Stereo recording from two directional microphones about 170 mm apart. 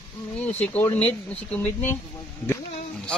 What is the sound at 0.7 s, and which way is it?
Speech, 10° left (ahead or behind).